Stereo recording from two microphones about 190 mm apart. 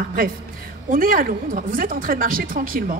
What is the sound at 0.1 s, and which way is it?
A woman's voice, 50° right (ahead or behind).